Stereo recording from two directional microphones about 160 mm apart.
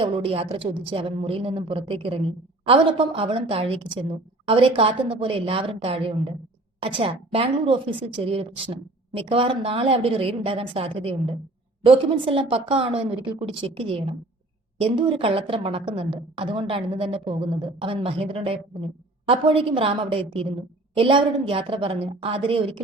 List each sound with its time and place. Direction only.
0.0 s a woman's voice: 35° right (ahead or behind)